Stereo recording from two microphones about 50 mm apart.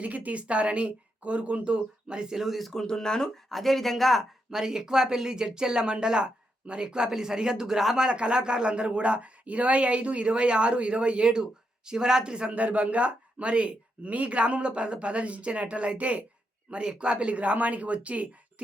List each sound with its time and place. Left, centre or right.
0.0 s speech: right; by 4.6 s centre
4.6 s speech: centre
8.1 s speech: centre